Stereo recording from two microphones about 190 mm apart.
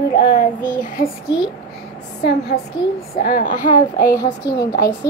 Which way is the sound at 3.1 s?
50° left (ahead or behind).